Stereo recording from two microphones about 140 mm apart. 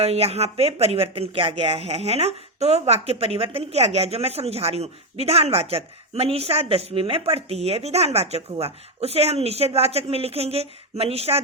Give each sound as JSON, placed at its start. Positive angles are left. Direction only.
{"t": 0.0, "sound": "speech", "side_deg": -45}